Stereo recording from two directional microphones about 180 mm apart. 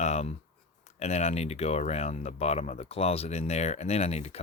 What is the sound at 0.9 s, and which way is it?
Speech, 35° left (ahead or behind).